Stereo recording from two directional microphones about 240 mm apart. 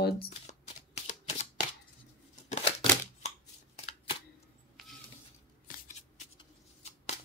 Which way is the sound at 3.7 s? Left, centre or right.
Left.